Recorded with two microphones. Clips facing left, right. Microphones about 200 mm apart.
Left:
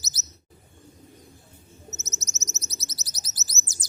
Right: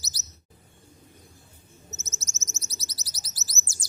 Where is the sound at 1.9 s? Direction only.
20° left (ahead or behind).